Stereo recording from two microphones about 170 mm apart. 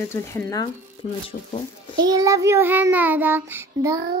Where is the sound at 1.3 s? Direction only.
50° left (ahead or behind).